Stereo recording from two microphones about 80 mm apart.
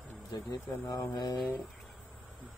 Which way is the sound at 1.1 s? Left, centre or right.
Left.